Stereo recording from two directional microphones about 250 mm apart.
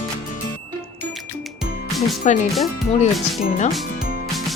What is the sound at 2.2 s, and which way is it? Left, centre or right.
Speech, left.